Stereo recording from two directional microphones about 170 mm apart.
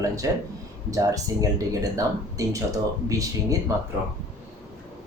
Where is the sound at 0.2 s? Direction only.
20° right (ahead or behind).